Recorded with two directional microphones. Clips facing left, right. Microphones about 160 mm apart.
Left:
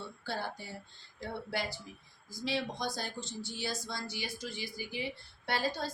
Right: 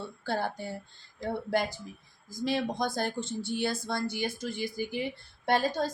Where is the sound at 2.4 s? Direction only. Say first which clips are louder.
Right 6 dB; 50° right (ahead or behind).